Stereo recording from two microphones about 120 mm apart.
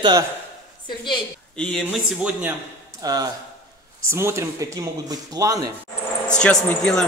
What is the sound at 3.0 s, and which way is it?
Speech, 35° right (ahead or behind).